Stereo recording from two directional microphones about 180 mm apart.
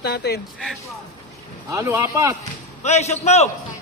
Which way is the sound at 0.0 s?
70° left (ahead or behind).